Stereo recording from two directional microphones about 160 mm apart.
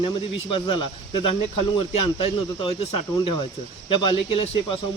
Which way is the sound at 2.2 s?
30° left (ahead or behind).